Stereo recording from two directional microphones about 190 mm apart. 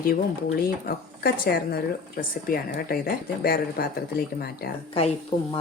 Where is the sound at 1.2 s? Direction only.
55° left (ahead or behind).